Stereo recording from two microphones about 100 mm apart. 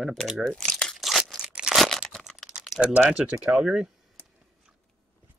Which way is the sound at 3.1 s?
10° right (ahead or behind).